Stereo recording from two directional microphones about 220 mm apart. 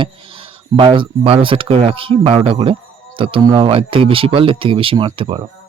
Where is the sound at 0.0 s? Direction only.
25° right (ahead or behind).